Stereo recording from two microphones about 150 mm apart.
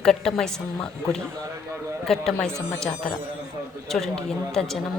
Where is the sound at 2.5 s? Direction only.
20° right (ahead or behind).